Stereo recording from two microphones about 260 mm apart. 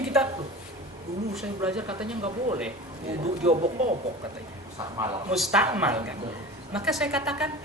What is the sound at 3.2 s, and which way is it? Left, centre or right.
Speech, right.